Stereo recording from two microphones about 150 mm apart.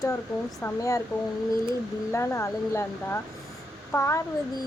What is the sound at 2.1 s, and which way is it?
Speech, 20° left (ahead or behind).